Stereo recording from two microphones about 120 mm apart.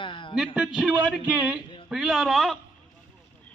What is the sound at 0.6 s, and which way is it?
A man's voice, 5° right (ahead or behind).